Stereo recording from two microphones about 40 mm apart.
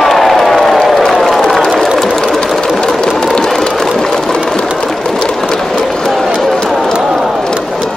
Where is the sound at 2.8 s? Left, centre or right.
Centre.